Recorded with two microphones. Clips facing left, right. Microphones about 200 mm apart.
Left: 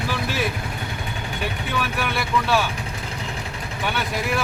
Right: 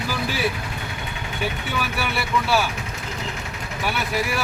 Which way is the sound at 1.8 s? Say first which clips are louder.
Left 1 dB; 5° right (ahead or behind).